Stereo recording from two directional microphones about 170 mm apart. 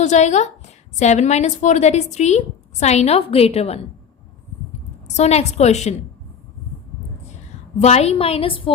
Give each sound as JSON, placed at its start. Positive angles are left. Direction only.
{"t": 0.0, "sound": "a woman's voice", "side_deg": 45}
{"t": 5.0, "sound": "a woman's voice", "side_deg": 40}
{"t": 7.8, "sound": "a woman's voice", "side_deg": 40}